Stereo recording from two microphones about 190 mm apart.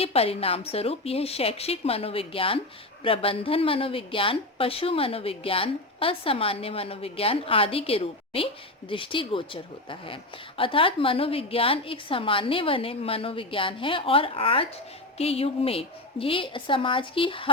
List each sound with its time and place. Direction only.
0.0 s a woman's voice: 30° left (ahead or behind)